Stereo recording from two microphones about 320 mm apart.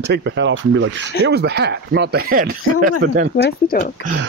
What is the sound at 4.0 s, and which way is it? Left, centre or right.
Speech, left.